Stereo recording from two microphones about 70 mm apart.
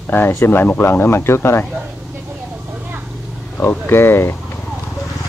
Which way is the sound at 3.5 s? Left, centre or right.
Left.